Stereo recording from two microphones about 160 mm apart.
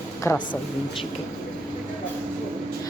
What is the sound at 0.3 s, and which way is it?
Speech, 15° left (ahead or behind).